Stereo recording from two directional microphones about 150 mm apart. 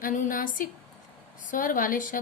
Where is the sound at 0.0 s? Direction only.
60° left (ahead or behind).